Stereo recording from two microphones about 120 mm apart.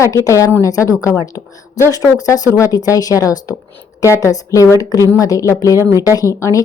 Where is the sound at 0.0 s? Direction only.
25° left (ahead or behind).